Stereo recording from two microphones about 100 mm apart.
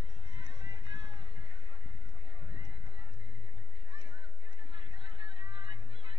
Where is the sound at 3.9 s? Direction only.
80° right.